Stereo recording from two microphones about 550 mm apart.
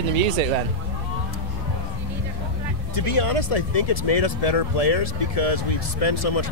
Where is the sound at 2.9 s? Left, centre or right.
Left.